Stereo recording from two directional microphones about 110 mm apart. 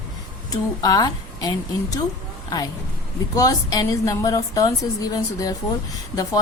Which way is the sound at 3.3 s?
30° left (ahead or behind).